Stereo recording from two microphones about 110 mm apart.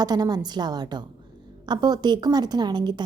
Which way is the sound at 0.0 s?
35° right (ahead or behind).